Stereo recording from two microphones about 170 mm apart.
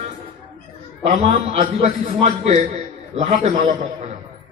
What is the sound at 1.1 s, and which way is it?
A man's voice, 45° right (ahead or behind).